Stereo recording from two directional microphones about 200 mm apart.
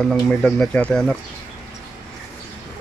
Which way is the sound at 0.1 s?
5° left (ahead or behind).